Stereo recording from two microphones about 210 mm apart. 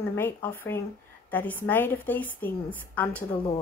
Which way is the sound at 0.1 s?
10° left (ahead or behind).